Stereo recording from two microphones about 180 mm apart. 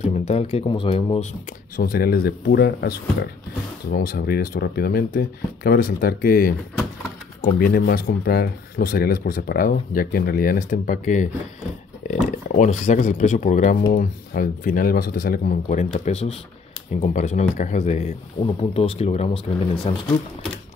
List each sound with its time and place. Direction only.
0.0 s speech: 35° left (ahead or behind)
1.8 s speech: 55° left (ahead or behind)
7.5 s speech: 55° left (ahead or behind)
12.5 s speech: 40° left (ahead or behind)